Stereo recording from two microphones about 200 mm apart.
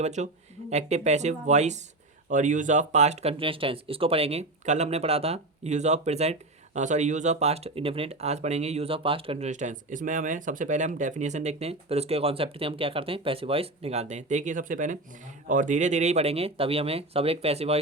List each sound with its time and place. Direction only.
0.0 s speech: 35° right (ahead or behind)